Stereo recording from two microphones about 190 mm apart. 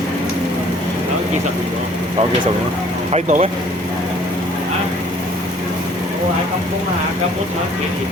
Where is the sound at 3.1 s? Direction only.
40° right (ahead or behind).